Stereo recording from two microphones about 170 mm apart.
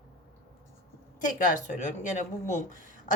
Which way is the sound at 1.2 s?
45° left (ahead or behind).